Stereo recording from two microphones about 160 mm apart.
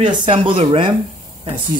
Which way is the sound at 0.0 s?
30° right (ahead or behind).